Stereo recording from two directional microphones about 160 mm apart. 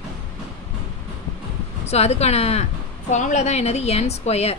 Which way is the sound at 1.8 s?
40° left (ahead or behind).